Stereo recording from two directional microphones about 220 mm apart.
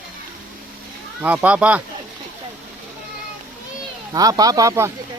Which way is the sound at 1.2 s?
5° right (ahead or behind).